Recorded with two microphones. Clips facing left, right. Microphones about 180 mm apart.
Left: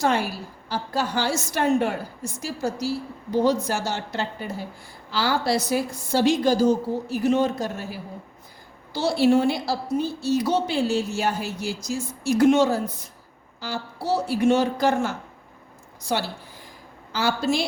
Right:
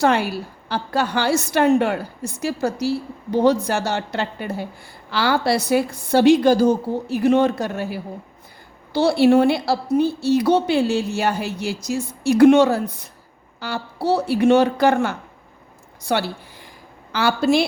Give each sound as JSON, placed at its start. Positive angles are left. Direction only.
{"t": 0.0, "sound": "a woman's voice", "side_deg": -65}